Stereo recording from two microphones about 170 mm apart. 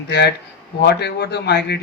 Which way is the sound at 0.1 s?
75° left (ahead or behind).